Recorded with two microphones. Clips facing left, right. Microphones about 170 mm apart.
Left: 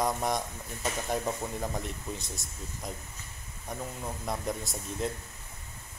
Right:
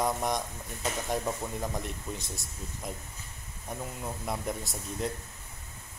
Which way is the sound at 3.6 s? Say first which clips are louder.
Even; centre (ahead or behind).